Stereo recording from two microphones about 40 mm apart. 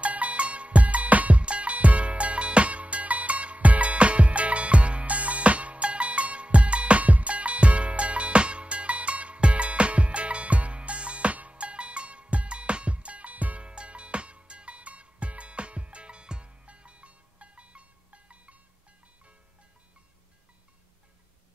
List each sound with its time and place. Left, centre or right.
0.0 s music: right
13.6 s music: right